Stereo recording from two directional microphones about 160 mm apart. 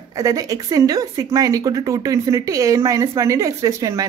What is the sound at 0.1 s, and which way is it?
A woman's voice, 20° right (ahead or behind).